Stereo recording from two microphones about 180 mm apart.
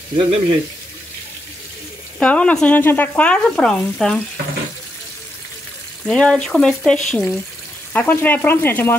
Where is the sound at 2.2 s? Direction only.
5° left (ahead or behind).